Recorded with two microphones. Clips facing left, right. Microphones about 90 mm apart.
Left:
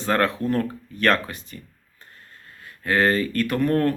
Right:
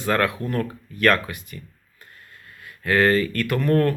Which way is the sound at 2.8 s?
25° left (ahead or behind).